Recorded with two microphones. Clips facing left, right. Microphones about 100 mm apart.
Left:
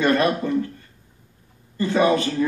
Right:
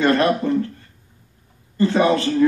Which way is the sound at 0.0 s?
30° right (ahead or behind).